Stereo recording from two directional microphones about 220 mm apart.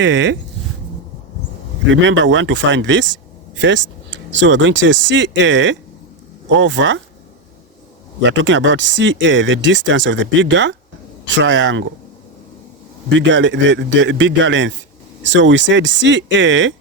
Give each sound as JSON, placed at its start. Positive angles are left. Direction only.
{"t": 0.0, "sound": "speech", "side_deg": -55}
{"t": 1.9, "sound": "speech", "side_deg": -55}
{"t": 8.2, "sound": "speech", "side_deg": -55}
{"t": 13.1, "sound": "speech", "side_deg": -55}